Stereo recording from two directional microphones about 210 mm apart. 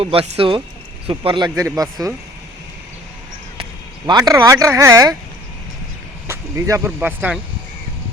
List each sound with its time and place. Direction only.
0.0 s speech: 25° right (ahead or behind)
3.6 s speech: 20° right (ahead or behind)
6.2 s speech: 10° right (ahead or behind)